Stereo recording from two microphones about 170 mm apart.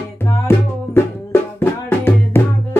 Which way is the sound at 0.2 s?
15° left (ahead or behind).